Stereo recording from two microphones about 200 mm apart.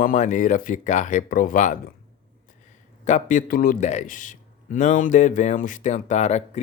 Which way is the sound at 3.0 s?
35° left (ahead or behind).